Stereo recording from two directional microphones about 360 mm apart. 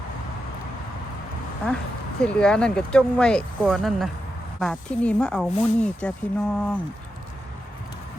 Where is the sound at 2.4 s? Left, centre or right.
Centre.